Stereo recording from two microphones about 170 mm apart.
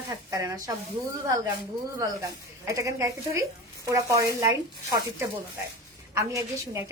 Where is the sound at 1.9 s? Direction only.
20° right (ahead or behind).